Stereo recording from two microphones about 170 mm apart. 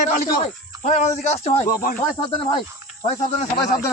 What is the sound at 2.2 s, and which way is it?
Speech, 30° left (ahead or behind).